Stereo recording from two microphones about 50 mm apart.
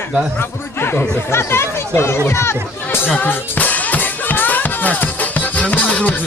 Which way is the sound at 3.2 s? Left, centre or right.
Left.